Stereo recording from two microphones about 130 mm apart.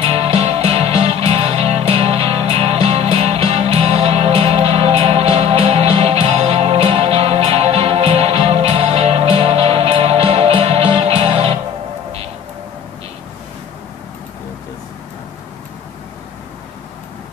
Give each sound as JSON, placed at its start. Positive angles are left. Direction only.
{"t": 0.0, "sound": "music", "side_deg": -55}